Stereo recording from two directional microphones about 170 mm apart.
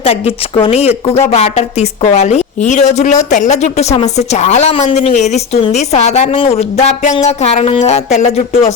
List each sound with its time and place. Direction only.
0.0 s a woman's voice: 35° left (ahead or behind)